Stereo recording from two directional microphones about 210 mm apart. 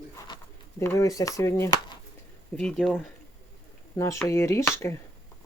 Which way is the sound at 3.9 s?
15° left (ahead or behind).